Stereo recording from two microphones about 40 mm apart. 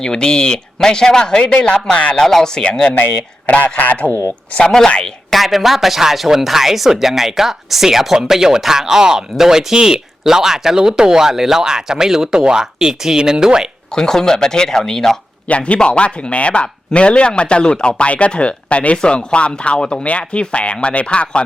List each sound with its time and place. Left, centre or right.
0.0 s a man's voice: centre
2.2 s speech: centre
3.6 s speech: left
5.3 s speech: centre
13.9 s speech: centre
15.4 s a man's voice: left